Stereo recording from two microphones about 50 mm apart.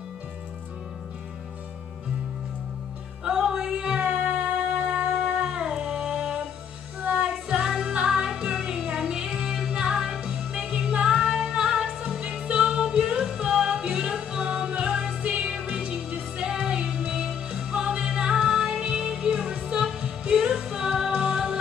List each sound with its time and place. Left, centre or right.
3.3 s music: centre
7.0 s music: right
7.5 s music: centre